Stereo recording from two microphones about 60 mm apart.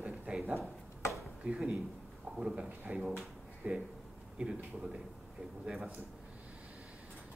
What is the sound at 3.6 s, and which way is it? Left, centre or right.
Speech, right.